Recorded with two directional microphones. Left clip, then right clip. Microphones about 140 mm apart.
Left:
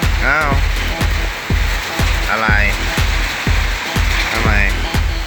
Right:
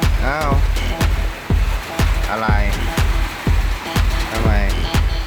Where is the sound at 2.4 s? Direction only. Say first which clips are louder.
Left 7 dB; 20° right (ahead or behind).